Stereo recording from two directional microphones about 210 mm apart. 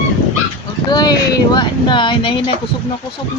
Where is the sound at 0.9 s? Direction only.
20° left (ahead or behind).